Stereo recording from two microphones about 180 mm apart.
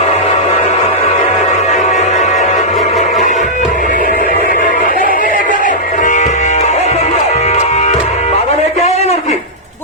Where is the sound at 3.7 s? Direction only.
45° left (ahead or behind).